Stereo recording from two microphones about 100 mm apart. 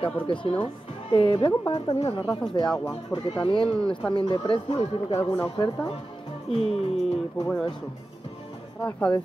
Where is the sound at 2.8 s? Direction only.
45° left (ahead or behind).